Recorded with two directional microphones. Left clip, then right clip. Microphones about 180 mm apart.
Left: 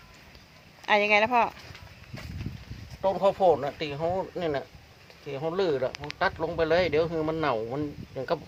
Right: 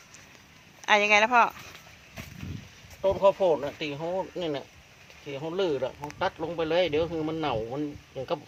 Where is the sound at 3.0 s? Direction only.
20° left (ahead or behind).